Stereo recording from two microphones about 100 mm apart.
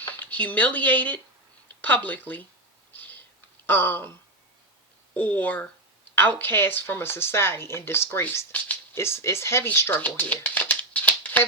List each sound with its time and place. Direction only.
0.0 s speech: 20° left (ahead or behind)
2.9 s a sound: 20° left (ahead or behind)
3.7 s speech: 20° left (ahead or behind)